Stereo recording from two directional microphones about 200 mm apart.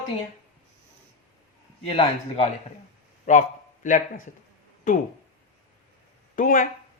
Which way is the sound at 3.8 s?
40° left (ahead or behind).